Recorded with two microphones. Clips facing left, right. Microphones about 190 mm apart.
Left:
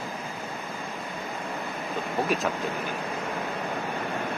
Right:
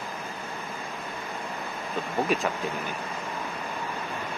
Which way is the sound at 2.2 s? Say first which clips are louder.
Even; centre (ahead or behind).